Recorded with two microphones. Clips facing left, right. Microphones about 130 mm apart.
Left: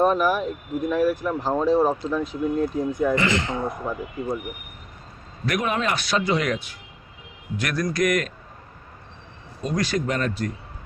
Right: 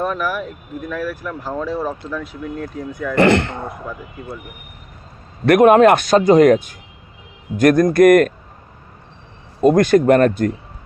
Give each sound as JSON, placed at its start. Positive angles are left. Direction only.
{"t": 0.0, "sound": "speech", "side_deg": 25}
{"t": 3.2, "sound": "speech", "side_deg": -60}
{"t": 5.5, "sound": "speech", "side_deg": -55}
{"t": 9.6, "sound": "speech", "side_deg": -50}